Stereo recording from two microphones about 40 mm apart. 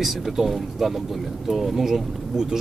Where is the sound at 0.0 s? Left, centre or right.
Centre.